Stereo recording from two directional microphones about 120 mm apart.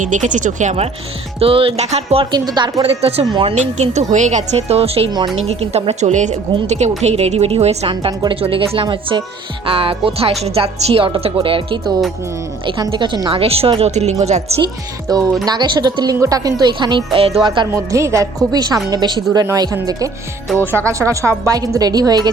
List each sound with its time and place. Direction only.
0.0 s speech: 90° right
1.4 s a woman's voice: 50° right (ahead or behind)
2.3 s speech: 35° right (ahead or behind)
2.8 s a woman's voice: 55° right (ahead or behind)
3.5 s a woman's voice: 75° right (ahead or behind); by 13.4 s 40° right (ahead or behind)
13.4 s a woman's voice: 55° right (ahead or behind); by 14.4 s 70° right (ahead or behind)
15.1 s speech: 30° right (ahead or behind); by 17.4 s 50° right (ahead or behind)
17.4 s speech: 40° right (ahead or behind)
17.7 s a woman's voice: 25° right (ahead or behind)